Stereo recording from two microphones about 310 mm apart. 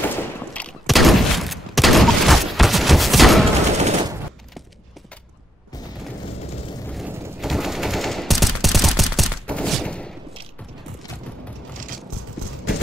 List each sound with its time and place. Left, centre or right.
0.1 s fusillade: centre
3.7 s machine gun: right
6.9 s machine gun: centre